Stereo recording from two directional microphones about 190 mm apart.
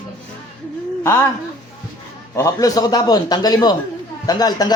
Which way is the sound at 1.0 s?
10° left (ahead or behind).